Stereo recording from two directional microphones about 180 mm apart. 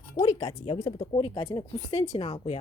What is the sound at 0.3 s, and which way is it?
Speech, 25° left (ahead or behind).